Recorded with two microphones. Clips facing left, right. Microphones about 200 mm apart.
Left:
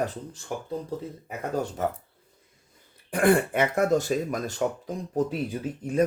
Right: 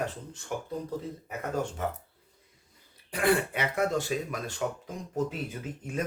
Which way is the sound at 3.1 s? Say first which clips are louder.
Left 5 dB; 50° left (ahead or behind).